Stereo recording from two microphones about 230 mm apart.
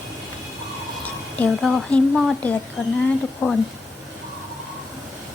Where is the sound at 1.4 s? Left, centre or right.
Centre.